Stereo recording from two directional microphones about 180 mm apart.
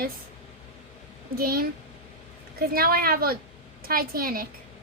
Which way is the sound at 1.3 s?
55° right (ahead or behind).